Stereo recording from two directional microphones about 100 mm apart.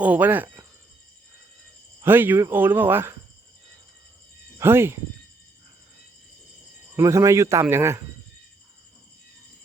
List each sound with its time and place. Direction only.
0.0 s speech: 15° right (ahead or behind)
2.0 s speech: 20° right (ahead or behind)
4.5 s speech: 25° right (ahead or behind)
6.9 s speech: 30° right (ahead or behind)